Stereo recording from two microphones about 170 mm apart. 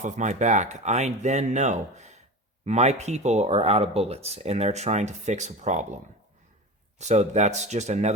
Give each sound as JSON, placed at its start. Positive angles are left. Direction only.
{"t": 0.0, "sound": "speech", "side_deg": -45}
{"t": 7.0, "sound": "speech", "side_deg": -40}